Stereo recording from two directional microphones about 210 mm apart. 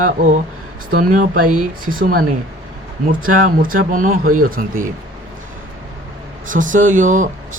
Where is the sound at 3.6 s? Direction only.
40° right (ahead or behind).